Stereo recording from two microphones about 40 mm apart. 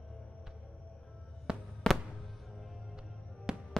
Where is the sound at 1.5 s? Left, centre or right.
Right.